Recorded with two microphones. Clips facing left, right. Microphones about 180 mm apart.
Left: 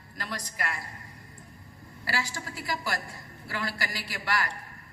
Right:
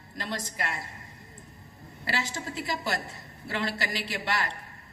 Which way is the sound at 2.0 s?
25° right (ahead or behind).